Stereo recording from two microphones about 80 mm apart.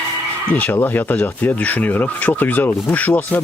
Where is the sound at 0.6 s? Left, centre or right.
Left.